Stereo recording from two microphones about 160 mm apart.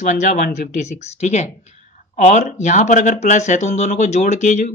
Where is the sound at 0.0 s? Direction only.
50° left (ahead or behind).